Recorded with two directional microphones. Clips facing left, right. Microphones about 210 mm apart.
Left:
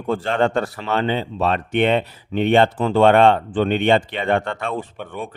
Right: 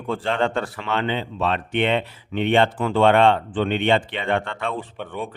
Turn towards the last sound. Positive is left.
turn(degrees=10)  # may be behind; listen again after turning